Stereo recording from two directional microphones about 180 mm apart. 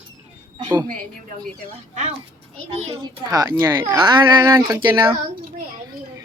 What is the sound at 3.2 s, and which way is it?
Speech, 20° right (ahead or behind).